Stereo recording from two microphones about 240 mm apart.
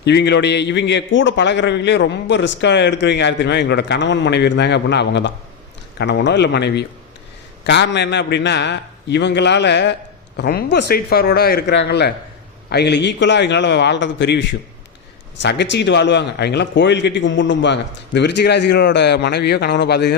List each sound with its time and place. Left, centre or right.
0.0 s a man's voice: left